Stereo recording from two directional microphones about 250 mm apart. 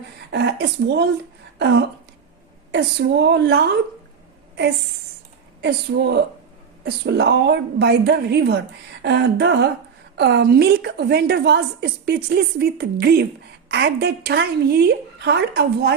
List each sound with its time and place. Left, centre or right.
0.3 s a woman's voice: right
5.6 s a woman's voice: right